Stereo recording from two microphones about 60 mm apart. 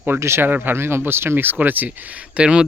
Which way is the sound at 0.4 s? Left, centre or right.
Right.